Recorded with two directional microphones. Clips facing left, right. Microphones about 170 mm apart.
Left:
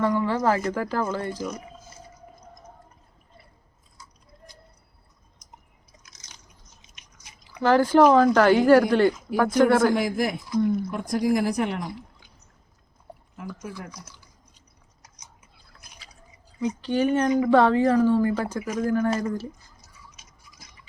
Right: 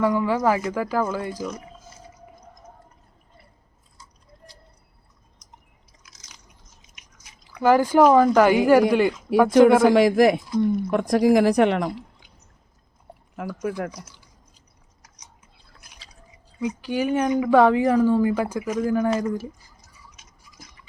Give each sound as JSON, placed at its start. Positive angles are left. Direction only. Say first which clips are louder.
{"t": 0.0, "sound": "speech", "louder": "right 2 dB", "side_deg": -10}
{"t": 7.6, "sound": "speech", "louder": "right 1 dB", "side_deg": -10}
{"t": 9.9, "sound": "speech", "louder": "right 8 dB", "side_deg": -90}
{"t": 13.3, "sound": "speech", "louder": "right 9 dB", "side_deg": -85}
{"t": 16.6, "sound": "speech", "louder": "left 1 dB", "side_deg": -10}